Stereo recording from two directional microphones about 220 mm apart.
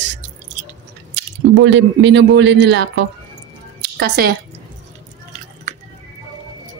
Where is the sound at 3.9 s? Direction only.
45° right (ahead or behind).